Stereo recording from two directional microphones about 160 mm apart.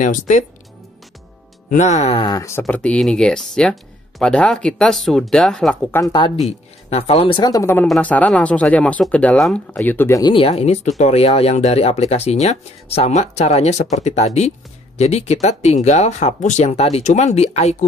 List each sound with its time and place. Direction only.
0.0 s speech: 50° left (ahead or behind)
1.7 s speech: 50° left (ahead or behind)
2.2 s speech: 20° left (ahead or behind)
2.6 s speech: 5° left (ahead or behind)
5.9 s speech: 15° left (ahead or behind)
6.1 s speech: 30° left (ahead or behind)
10.3 s speech: 40° left (ahead or behind)